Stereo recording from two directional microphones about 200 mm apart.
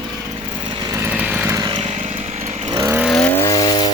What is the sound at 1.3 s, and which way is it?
Vehicle, 10° right (ahead or behind).